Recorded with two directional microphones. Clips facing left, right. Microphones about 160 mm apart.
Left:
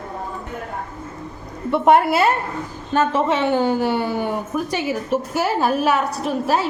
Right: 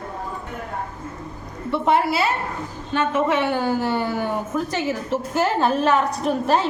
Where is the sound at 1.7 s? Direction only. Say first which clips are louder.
Left 5 dB; 50° left (ahead or behind).